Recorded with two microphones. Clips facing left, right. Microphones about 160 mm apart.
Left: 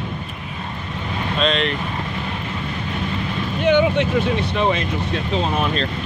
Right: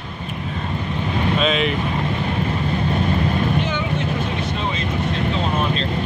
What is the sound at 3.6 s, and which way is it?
Speech, 70° left (ahead or behind).